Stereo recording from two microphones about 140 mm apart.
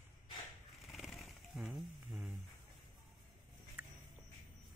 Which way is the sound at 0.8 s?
Centre (ahead or behind).